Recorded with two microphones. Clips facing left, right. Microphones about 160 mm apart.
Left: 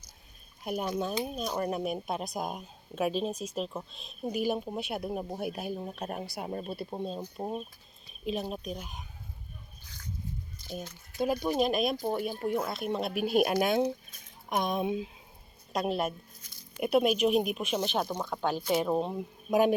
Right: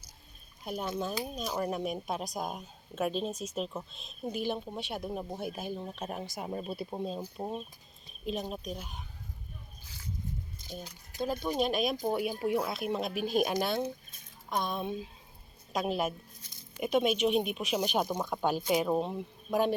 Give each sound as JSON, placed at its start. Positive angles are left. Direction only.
{"t": 0.6, "sound": "speech", "side_deg": 5}
{"t": 11.4, "sound": "speech", "side_deg": 0}
{"t": 11.9, "sound": "speech", "side_deg": -10}
{"t": 14.5, "sound": "speech", "side_deg": 20}
{"t": 15.7, "sound": "speech", "side_deg": 0}
{"t": 17.7, "sound": "speech", "side_deg": -10}
{"t": 18.9, "sound": "speech", "side_deg": 0}